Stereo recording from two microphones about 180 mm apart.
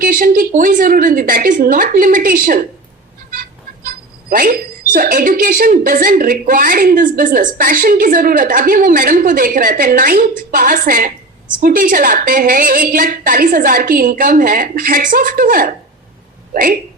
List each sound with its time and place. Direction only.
0.0 s a woman's voice: 50° right (ahead or behind)
3.8 s a sound: 55° right (ahead or behind)
4.9 s a woman's voice: 50° right (ahead or behind)